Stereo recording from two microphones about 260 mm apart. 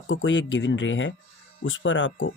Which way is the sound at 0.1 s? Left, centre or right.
Left.